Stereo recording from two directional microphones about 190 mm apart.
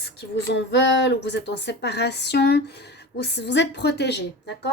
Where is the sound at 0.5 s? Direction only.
70° left (ahead or behind).